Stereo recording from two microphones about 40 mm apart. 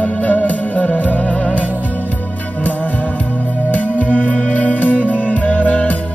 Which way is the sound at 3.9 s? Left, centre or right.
Left.